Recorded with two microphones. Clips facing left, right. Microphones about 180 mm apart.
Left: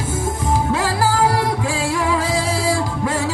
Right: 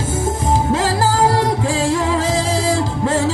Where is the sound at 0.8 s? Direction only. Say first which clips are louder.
Right 2 dB; 45° right (ahead or behind).